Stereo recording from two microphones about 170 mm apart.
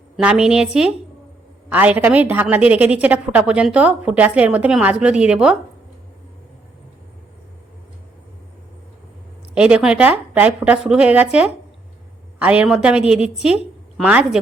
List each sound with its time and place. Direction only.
0.2 s a woman's voice: 5° right (ahead or behind)
9.6 s a woman's voice: 5° right (ahead or behind)